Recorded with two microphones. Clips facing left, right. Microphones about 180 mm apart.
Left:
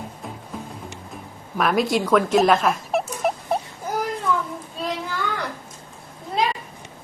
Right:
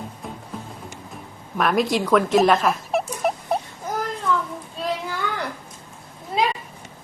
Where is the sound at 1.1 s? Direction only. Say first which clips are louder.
Even; centre (ahead or behind).